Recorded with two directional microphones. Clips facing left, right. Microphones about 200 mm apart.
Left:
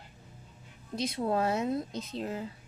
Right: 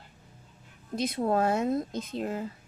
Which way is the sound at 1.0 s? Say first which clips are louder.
Right 3 dB; 50° right (ahead or behind).